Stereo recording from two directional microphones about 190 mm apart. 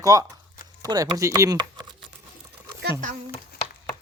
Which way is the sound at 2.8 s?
55° right (ahead or behind).